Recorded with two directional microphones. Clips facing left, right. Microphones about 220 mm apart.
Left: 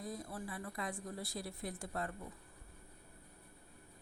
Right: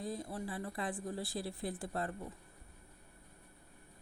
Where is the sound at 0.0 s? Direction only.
25° right (ahead or behind).